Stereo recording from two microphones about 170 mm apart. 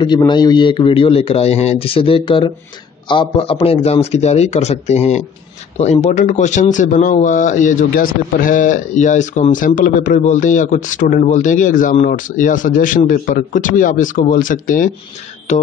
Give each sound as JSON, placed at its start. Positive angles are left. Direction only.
{"t": 0.3, "sound": "speech", "side_deg": 25}